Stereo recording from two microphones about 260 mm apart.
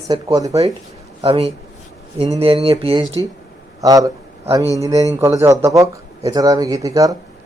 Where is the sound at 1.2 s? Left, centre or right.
Right.